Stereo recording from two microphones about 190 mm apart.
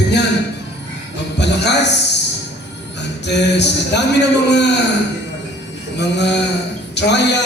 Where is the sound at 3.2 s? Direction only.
65° left (ahead or behind).